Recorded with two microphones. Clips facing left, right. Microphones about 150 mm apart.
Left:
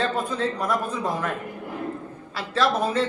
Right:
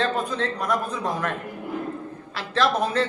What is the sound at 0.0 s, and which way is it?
A man's voice, 5° left (ahead or behind).